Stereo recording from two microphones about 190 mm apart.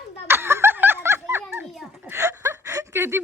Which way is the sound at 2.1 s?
15° right (ahead or behind).